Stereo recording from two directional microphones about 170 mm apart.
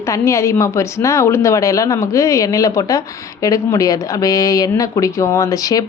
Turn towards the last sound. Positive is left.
turn(degrees=20)  # may be behind; listen again after turning